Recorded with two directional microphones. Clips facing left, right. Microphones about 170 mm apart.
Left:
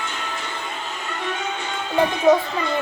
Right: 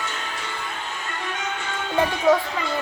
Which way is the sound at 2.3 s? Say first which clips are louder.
Left 3 dB; 20° left (ahead or behind).